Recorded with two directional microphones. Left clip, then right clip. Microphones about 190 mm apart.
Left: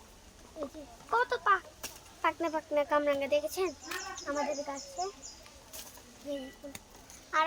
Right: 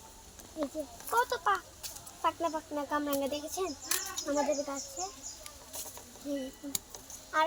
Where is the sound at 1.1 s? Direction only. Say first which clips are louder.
Left 2 dB; 30° left (ahead or behind).